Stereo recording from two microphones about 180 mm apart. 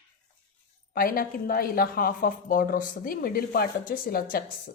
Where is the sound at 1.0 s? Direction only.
50° left (ahead or behind).